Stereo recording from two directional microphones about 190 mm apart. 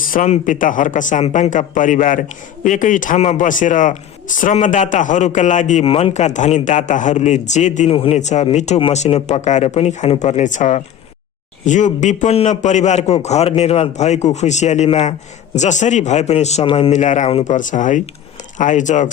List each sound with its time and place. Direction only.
0.0 s a man's voice: 45° left (ahead or behind)